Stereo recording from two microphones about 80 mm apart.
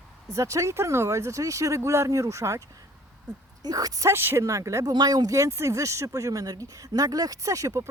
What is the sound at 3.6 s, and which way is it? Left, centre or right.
Speech, right.